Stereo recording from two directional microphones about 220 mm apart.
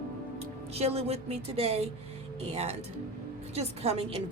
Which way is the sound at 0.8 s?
30° right (ahead or behind).